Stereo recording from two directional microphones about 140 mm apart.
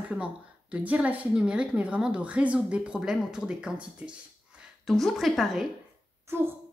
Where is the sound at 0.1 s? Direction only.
10° right (ahead or behind).